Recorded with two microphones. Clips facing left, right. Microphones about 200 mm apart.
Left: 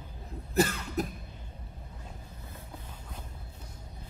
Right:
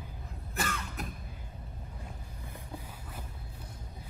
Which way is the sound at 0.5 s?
35° left (ahead or behind).